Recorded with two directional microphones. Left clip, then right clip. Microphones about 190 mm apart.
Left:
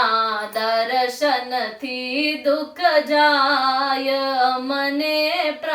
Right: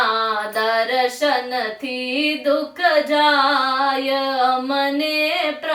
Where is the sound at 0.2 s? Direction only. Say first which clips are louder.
Right 1 dB; 15° right (ahead or behind).